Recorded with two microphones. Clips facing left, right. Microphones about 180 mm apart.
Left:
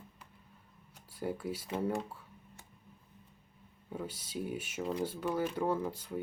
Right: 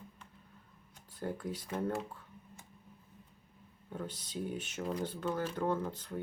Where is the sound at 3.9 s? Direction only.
10° left (ahead or behind).